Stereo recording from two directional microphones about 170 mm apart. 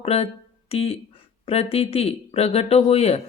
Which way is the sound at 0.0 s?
35° left (ahead or behind).